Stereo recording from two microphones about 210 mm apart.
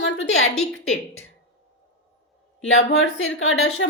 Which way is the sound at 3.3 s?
70° left (ahead or behind).